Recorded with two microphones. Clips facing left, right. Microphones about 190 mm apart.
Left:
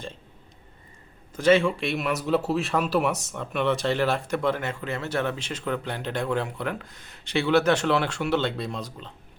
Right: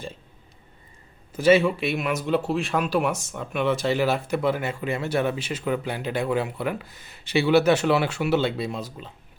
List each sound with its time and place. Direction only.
1.3 s speech: 5° right (ahead or behind)